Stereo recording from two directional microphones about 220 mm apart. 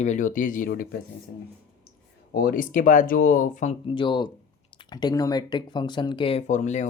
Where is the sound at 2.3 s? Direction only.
40° left (ahead or behind).